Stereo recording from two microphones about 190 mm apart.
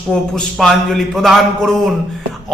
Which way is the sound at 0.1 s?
5° left (ahead or behind).